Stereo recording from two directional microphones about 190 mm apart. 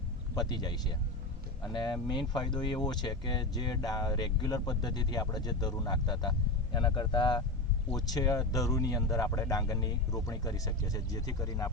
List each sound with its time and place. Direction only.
0.3 s speech: 20° left (ahead or behind)